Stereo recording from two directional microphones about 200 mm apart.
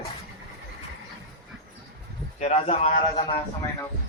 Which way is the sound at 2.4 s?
30° left (ahead or behind).